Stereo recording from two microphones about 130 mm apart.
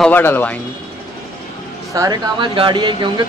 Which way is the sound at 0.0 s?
15° left (ahead or behind).